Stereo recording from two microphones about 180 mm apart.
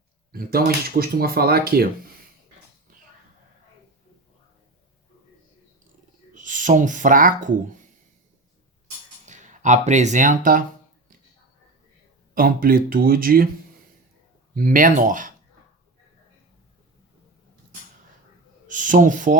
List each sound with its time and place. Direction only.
0.3 s speech: 55° right (ahead or behind)
6.3 s speech: 45° right (ahead or behind)
9.2 s speech: 45° right (ahead or behind)
12.3 s speech: 50° right (ahead or behind)
14.5 s speech: 50° right (ahead or behind)
18.7 s speech: 45° right (ahead or behind)